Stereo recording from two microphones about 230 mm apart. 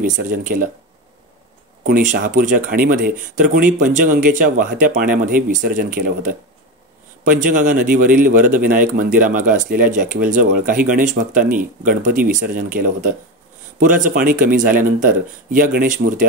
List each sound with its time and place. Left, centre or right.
0.0 s speech: right
1.9 s speech: right